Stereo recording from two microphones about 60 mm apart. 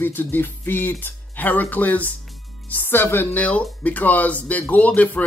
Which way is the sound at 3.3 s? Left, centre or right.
Left.